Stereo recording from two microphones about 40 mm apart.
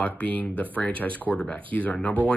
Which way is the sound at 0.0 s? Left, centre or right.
Left.